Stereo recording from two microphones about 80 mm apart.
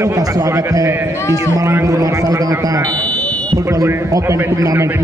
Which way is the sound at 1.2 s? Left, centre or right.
Left.